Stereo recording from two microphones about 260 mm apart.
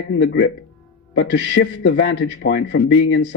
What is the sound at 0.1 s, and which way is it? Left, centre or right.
A man's voice, left.